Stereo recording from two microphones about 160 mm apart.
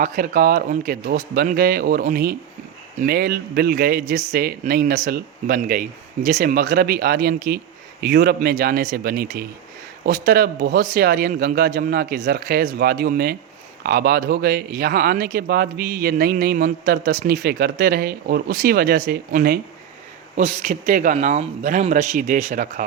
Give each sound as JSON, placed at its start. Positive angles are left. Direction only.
{"t": 0.0, "sound": "speech", "side_deg": -60}
{"t": 8.0, "sound": "a man's voice", "side_deg": -80}
{"t": 8.4, "sound": "speech", "side_deg": -60}
{"t": 9.0, "sound": "speech", "side_deg": -70}
{"t": 20.3, "sound": "speech", "side_deg": -50}